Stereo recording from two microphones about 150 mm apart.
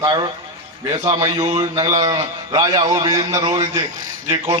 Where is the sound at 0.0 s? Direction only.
25° right (ahead or behind).